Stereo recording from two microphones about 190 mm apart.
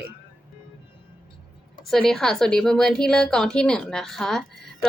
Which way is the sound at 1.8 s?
Centre (ahead or behind).